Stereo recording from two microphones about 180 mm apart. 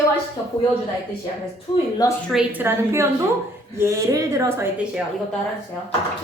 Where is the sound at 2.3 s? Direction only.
5° right (ahead or behind).